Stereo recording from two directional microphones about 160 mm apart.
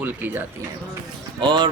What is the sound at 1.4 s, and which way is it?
Speech, 30° right (ahead or behind).